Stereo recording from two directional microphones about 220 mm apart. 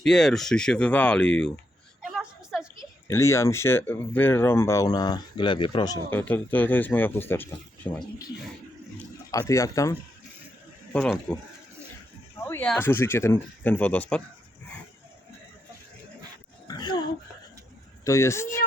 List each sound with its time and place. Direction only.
0.0 s speech: centre (ahead or behind)
2.0 s a sound: 5° right (ahead or behind)
3.1 s speech: 15° left (ahead or behind)
9.3 s speech: 15° left (ahead or behind)
10.9 s speech: centre (ahead or behind)
12.4 s speech: 10° left (ahead or behind)
16.6 s a sound: 20° left (ahead or behind)
18.0 s speech: 15° left (ahead or behind)